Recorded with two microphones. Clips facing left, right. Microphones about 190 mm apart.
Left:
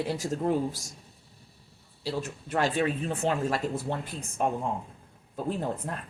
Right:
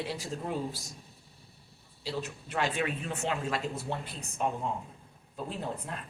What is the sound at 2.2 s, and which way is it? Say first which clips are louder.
Speech: left 5 dB; 45° left (ahead or behind).